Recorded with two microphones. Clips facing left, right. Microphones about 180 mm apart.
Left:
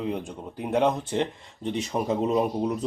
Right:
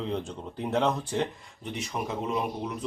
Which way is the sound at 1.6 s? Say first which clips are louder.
Left 6 dB; 30° left (ahead or behind).